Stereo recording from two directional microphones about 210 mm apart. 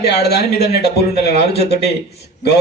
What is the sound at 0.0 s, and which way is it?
Speech, 50° left (ahead or behind).